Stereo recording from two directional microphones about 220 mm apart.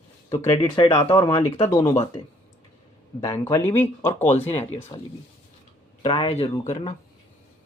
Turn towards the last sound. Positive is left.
turn(degrees=30)  # may be behind; listen again after turning